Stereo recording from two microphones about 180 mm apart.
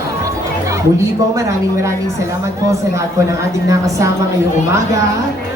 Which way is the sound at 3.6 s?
20° right (ahead or behind).